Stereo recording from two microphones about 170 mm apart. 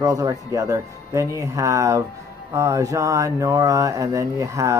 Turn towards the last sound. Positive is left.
turn(degrees=-20)  # may be behind; listen again after turning